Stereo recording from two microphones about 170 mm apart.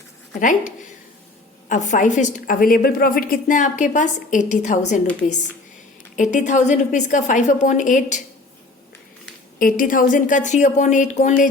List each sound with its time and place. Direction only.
0.3 s a woman's voice: 50° left (ahead or behind)
6.1 s a woman's voice: 45° left (ahead or behind)
9.6 s a woman's voice: 55° left (ahead or behind)